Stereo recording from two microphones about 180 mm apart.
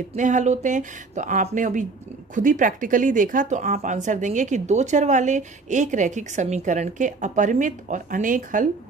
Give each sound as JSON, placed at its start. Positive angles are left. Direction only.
{"t": 0.1, "sound": "speech", "side_deg": -40}